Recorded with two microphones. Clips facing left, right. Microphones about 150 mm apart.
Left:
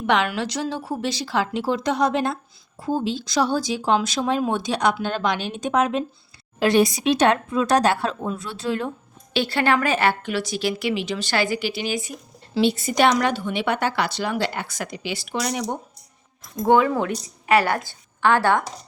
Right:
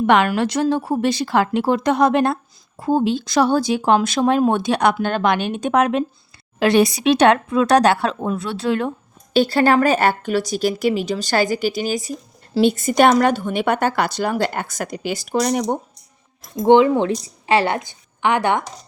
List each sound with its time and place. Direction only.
0.1 s a woman's voice: 50° right (ahead or behind); by 8.9 s 65° right (ahead or behind)
9.3 s speech: 40° right (ahead or behind)
16.6 s a woman's voice: 25° right (ahead or behind)